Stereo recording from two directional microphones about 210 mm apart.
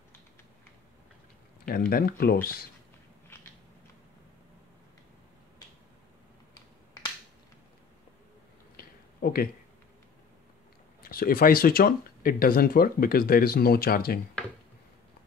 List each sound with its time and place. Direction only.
1.7 s speech: 45° left (ahead or behind)
8.7 s a sound: 45° left (ahead or behind)
11.0 s speech: 45° left (ahead or behind)